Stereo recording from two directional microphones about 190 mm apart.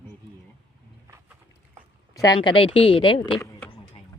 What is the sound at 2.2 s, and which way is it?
Speech, 25° left (ahead or behind).